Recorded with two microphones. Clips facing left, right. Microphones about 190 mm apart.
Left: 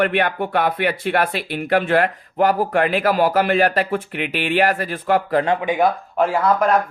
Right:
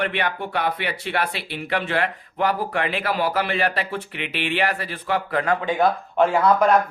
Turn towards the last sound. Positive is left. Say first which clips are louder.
# even
turn(degrees=0)  # may be behind; listen again after turning